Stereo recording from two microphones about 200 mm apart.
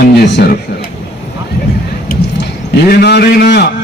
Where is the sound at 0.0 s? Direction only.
55° left (ahead or behind).